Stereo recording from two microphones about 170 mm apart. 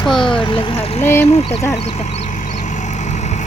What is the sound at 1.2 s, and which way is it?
Speech, 40° left (ahead or behind).